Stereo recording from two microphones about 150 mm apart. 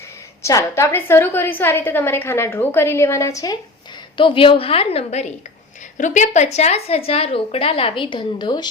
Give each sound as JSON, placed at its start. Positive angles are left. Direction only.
{"t": 0.8, "sound": "a woman's voice", "side_deg": 15}
{"t": 4.2, "sound": "a woman's voice", "side_deg": 35}